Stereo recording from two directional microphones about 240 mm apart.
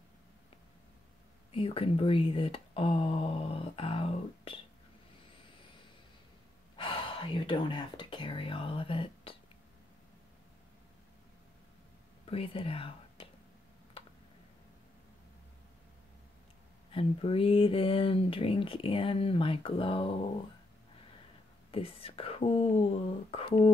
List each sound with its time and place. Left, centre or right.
1.5 s speech: left
6.8 s speech: left
12.3 s speech: left
16.9 s speech: left
21.6 s speech: left